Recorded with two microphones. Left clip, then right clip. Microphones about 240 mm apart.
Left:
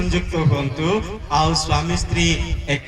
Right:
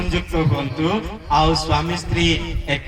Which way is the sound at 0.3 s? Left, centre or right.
Left.